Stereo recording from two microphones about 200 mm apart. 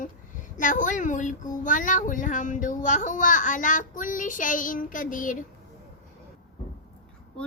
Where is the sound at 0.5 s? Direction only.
40° left (ahead or behind).